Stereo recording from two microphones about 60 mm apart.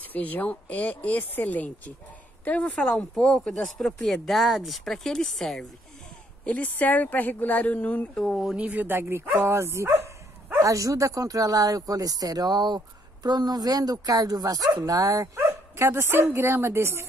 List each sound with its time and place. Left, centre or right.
0.0 s speech: left
2.7 s speech: centre
6.4 s speech: left
8.2 s speech: centre
8.5 s speech: right
9.5 s speech: right
10.6 s speech: right
14.9 s speech: right